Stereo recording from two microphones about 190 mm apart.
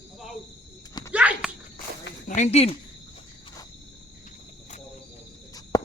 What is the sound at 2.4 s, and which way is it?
Speech, 35° left (ahead or behind).